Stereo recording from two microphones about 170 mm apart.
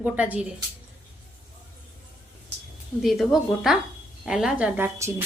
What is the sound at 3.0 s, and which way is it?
A woman's voice, centre (ahead or behind).